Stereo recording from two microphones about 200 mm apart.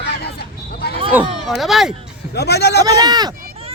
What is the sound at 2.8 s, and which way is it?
Speech, 20° right (ahead or behind).